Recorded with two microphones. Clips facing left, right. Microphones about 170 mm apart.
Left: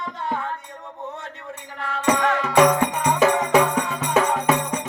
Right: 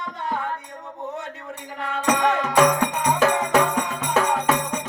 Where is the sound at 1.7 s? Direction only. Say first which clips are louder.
Right 1 dB; 20° right (ahead or behind).